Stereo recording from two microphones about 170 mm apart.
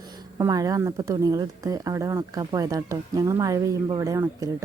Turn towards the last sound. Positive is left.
turn(degrees=-15)  # may be behind; listen again after turning